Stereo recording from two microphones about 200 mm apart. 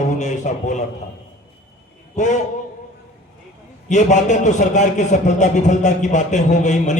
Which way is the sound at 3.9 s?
35° left (ahead or behind).